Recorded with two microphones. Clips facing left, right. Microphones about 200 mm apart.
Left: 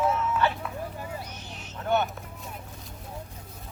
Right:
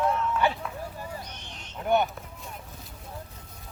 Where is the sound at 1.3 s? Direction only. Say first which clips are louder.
Left 3 dB; 5° left (ahead or behind).